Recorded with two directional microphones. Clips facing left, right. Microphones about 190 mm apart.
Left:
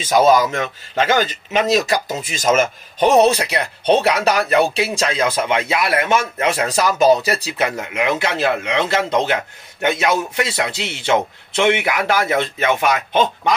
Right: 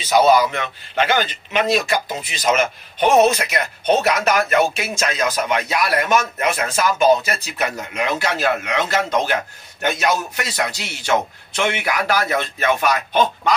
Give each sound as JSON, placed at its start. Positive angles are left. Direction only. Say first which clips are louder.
{"t": 0.0, "sound": "a man's voice", "louder": "left 1 dB", "side_deg": 50}
{"t": 3.3, "sound": "speech", "louder": "left 2 dB", "side_deg": 35}